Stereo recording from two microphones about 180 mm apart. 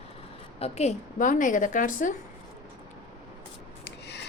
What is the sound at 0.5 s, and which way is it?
A woman's voice, 35° left (ahead or behind).